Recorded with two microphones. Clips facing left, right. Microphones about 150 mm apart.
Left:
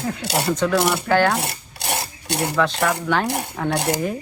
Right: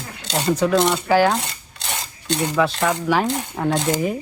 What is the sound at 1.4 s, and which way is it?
Rub, 65° left (ahead or behind).